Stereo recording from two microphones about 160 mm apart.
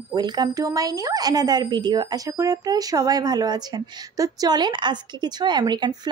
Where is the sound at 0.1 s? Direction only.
25° right (ahead or behind).